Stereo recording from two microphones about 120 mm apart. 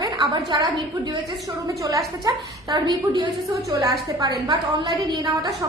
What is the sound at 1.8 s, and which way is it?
Speech, 30° right (ahead or behind).